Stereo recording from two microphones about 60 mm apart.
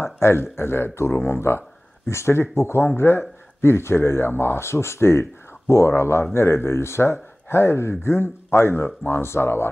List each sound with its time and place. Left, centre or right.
0.0 s speech: left